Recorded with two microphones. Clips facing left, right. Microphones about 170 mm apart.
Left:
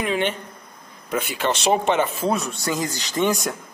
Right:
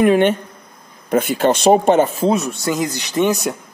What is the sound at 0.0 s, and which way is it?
Speech, 50° right (ahead or behind).